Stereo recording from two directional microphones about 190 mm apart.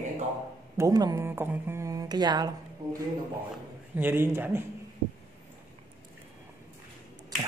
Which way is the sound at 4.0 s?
10° right (ahead or behind).